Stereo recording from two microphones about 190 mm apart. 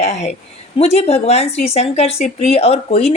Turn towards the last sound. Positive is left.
turn(degrees=30)  # may be behind; listen again after turning